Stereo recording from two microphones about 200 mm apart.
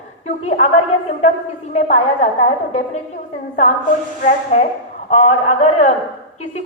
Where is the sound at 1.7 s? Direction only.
35° left (ahead or behind).